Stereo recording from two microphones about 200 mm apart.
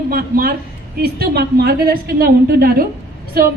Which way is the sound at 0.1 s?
50° right (ahead or behind).